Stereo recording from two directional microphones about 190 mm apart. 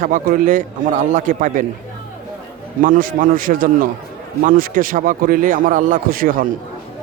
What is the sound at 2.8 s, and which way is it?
Speech, 45° right (ahead or behind).